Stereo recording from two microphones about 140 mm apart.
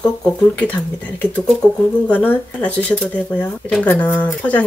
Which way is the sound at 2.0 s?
10° left (ahead or behind).